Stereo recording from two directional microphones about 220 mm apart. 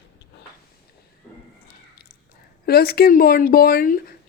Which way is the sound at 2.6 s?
45° left (ahead or behind).